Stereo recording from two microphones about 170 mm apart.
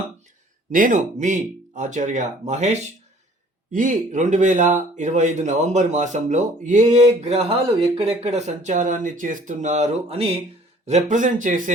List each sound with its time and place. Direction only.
0.7 s speech: 50° right (ahead or behind)